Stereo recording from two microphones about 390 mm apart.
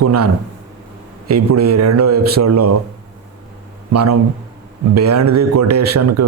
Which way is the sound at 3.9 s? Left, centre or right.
Right.